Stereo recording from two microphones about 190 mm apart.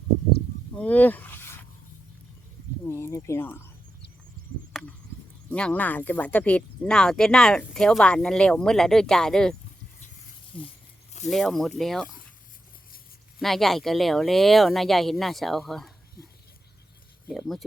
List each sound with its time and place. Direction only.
0.8 s speech: 10° left (ahead or behind)
2.8 s speech: 15° left (ahead or behind)
4.4 s chop: 50° right (ahead or behind)
4.7 s chop: centre (ahead or behind)
5.5 s speech: 5° left (ahead or behind)
10.5 s speech: 25° left (ahead or behind)
11.3 s speech: centre (ahead or behind)
13.4 s speech: centre (ahead or behind)
17.2 s speech: centre (ahead or behind)